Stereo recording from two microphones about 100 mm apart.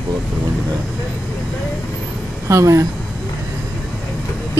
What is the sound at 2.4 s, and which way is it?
Speech, 30° right (ahead or behind).